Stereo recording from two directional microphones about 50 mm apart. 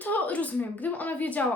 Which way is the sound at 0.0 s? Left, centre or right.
Left.